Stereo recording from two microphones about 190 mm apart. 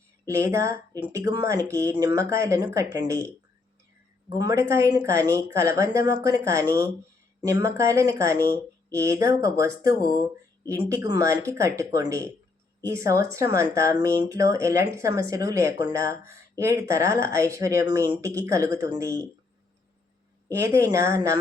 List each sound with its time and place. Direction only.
0.3 s speech: 15° right (ahead or behind)
4.4 s speech: 15° right (ahead or behind)
20.6 s speech: 15° right (ahead or behind)